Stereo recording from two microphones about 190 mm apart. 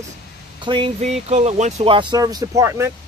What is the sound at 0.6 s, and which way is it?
Speech, 25° right (ahead or behind).